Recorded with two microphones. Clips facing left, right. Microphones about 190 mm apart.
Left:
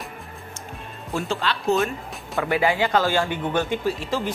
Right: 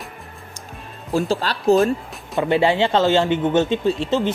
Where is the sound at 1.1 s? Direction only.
35° right (ahead or behind).